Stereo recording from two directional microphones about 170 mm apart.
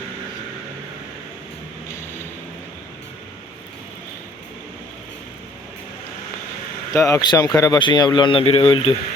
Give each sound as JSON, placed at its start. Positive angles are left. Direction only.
{"t": 6.9, "sound": "speech", "side_deg": 20}